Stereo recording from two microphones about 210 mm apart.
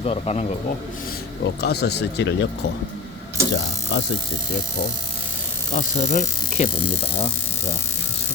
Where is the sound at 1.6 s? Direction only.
50° left (ahead or behind).